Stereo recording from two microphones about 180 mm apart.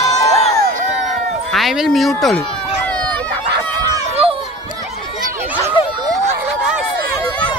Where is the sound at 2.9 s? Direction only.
5° left (ahead or behind).